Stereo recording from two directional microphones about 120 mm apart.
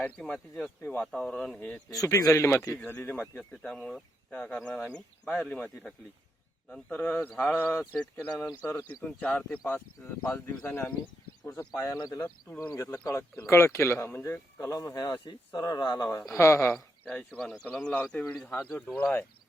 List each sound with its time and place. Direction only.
0.0 s speech: 15° left (ahead or behind)
0.3 s speech: 5° left (ahead or behind)
0.8 s speech: 15° left (ahead or behind)
1.9 s speech: 30° left (ahead or behind)
2.6 s speech: 15° left (ahead or behind); by 12.3 s 30° left (ahead or behind)
12.5 s speech: 15° left (ahead or behind)
12.7 s speech: 25° left (ahead or behind)
16.7 s speech: 5° left (ahead or behind)